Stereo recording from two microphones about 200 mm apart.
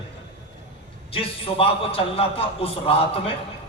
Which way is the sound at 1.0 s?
30° left (ahead or behind).